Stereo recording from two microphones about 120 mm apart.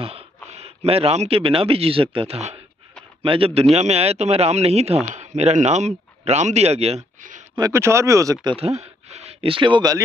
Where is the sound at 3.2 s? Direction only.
50° right (ahead or behind); by 7.4 s 75° right (ahead or behind).